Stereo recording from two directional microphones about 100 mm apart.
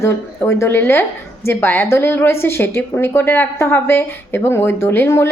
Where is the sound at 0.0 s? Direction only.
25° left (ahead or behind).